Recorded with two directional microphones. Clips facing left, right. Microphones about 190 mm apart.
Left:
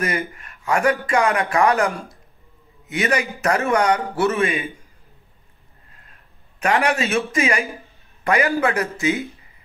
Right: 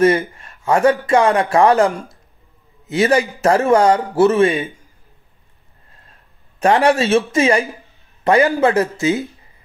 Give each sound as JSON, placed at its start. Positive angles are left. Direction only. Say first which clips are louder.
{"t": 0.3, "sound": "a man's voice", "louder": "right 5 dB", "side_deg": -30}
{"t": 1.9, "sound": "speech", "louder": "right 4 dB", "side_deg": -20}
{"t": 2.9, "sound": "a man's voice", "louder": "right 7 dB", "side_deg": -30}
{"t": 6.6, "sound": "a man's voice", "louder": "right 6 dB", "side_deg": -30}